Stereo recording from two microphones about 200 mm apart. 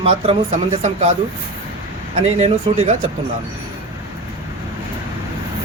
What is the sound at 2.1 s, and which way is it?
Speech, 30° right (ahead or behind).